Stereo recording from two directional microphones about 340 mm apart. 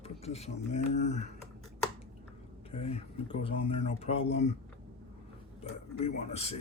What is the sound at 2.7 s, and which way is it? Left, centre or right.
Speech, centre.